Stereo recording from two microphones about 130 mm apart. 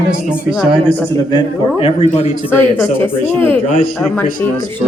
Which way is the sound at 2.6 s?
15° left (ahead or behind).